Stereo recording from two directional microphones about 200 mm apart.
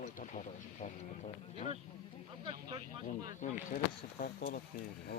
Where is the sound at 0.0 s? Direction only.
40° left (ahead or behind).